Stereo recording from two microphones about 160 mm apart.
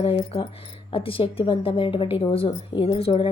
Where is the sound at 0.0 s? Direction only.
35° left (ahead or behind).